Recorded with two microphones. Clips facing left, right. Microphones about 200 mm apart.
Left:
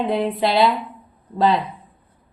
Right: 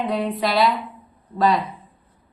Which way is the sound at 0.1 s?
30° left (ahead or behind).